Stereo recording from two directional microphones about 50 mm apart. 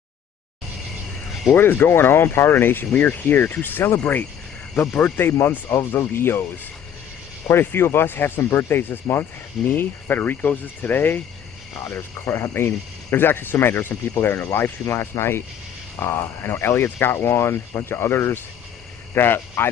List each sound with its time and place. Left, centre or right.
1.5 s speech: left
11.8 s speech: left